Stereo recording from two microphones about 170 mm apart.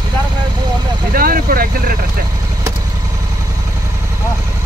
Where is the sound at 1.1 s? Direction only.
60° right (ahead or behind).